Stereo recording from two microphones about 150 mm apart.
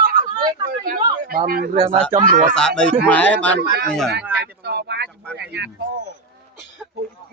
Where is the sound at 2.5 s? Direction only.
5° left (ahead or behind).